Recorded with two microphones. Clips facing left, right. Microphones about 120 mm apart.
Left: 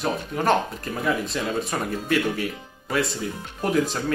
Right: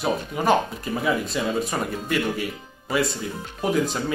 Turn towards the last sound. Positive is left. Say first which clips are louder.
# even
turn(degrees=0)  # may be behind; listen again after turning